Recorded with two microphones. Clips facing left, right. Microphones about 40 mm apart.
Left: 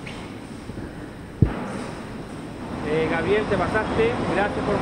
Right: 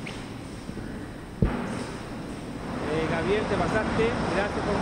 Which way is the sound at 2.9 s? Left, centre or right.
Left.